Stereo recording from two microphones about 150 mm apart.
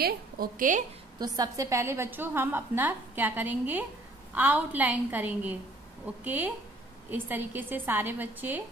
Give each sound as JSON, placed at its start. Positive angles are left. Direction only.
{"t": 0.0, "sound": "a woman's voice", "side_deg": -75}
{"t": 1.2, "sound": "a woman's voice", "side_deg": -25}